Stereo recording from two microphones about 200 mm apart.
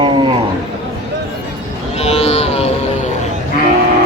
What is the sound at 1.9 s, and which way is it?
Music, 30° left (ahead or behind).